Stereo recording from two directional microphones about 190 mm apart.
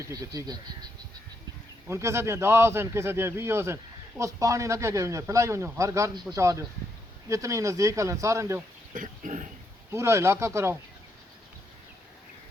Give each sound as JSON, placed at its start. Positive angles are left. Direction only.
{"t": 0.0, "sound": "speech", "side_deg": -20}
{"t": 1.9, "sound": "a man's voice", "side_deg": -15}
{"t": 8.9, "sound": "pig", "side_deg": -40}
{"t": 9.9, "sound": "a man's voice", "side_deg": -15}